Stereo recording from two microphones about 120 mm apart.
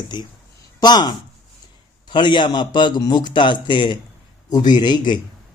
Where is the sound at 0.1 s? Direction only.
40° left (ahead or behind).